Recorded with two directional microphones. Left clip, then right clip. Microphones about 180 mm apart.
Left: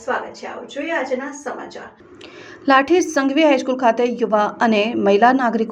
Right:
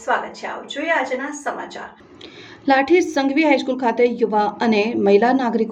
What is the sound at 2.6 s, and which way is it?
A woman's voice, 15° left (ahead or behind).